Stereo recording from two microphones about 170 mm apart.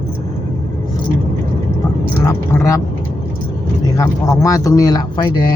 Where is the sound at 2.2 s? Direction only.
20° left (ahead or behind).